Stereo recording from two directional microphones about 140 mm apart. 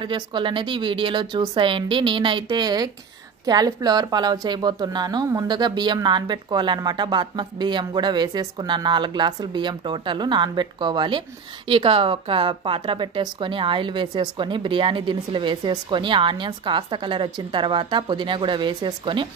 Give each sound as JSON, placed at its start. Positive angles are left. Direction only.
{"t": 0.0, "sound": "a woman's voice", "side_deg": -35}